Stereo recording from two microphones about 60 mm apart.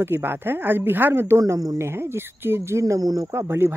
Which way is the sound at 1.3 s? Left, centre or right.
Right.